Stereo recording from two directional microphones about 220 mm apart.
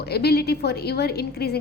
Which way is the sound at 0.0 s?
45° left (ahead or behind).